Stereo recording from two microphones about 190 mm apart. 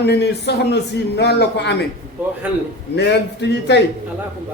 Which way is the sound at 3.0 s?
65° left (ahead or behind).